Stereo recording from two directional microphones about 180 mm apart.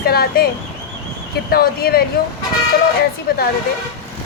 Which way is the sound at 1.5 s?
55° left (ahead or behind).